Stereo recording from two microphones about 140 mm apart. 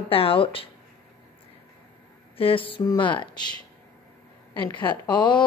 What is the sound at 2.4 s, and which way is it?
Speech, 40° left (ahead or behind).